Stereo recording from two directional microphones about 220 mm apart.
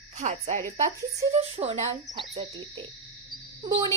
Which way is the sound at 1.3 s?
25° right (ahead or behind).